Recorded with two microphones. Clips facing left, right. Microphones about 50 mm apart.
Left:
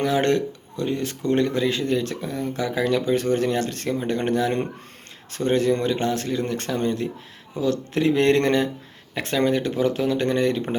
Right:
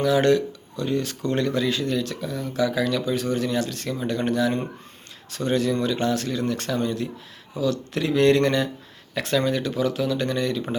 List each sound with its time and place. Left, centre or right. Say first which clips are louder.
0.0 s speech: right 2 dB; left